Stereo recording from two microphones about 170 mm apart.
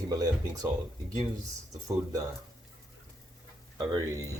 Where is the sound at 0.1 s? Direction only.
20° right (ahead or behind).